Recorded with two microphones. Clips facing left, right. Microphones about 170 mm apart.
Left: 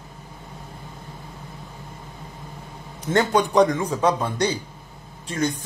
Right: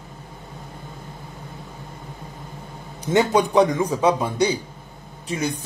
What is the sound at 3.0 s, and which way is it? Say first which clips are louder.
A man's voice: right 2 dB; 10° right (ahead or behind).